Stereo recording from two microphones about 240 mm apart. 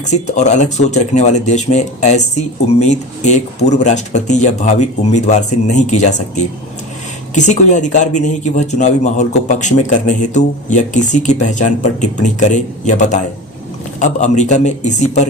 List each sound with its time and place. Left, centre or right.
0.1 s a man's voice: left